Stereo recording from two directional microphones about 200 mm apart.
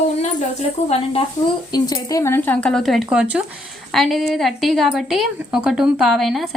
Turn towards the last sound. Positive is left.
turn(degrees=0)  # may be behind; listen again after turning